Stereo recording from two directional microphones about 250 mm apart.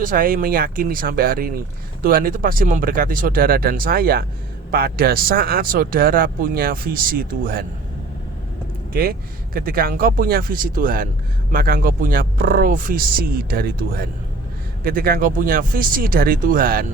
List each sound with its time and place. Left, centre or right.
0.0 s speech: right
8.9 s speech: right